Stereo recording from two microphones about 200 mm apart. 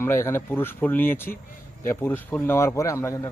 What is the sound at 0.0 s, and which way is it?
Speech, 15° left (ahead or behind).